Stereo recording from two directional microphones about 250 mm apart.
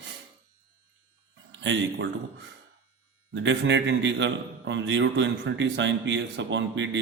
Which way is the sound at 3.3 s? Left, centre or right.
Right.